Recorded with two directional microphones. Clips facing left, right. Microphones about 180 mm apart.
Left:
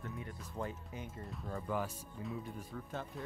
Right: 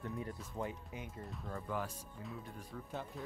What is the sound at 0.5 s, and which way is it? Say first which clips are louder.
Speech: left 1 dB; 15° right (ahead or behind).